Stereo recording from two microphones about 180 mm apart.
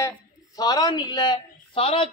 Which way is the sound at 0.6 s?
20° left (ahead or behind).